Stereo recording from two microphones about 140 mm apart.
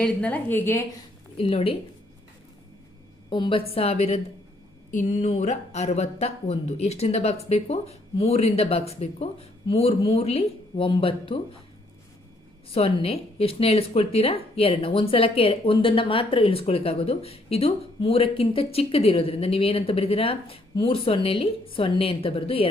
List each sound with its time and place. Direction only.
0.0 s a woman's voice: 10° left (ahead or behind)
1.4 s speech: 45° left (ahead or behind)
3.2 s speech: 35° left (ahead or behind)
4.9 s speech: 60° left (ahead or behind); by 11.3 s 40° left (ahead or behind)
12.7 s speech: 45° left (ahead or behind)